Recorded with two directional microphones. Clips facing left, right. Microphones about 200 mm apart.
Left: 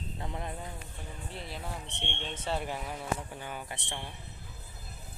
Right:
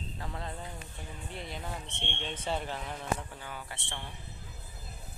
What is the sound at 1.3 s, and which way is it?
Speech, centre (ahead or behind).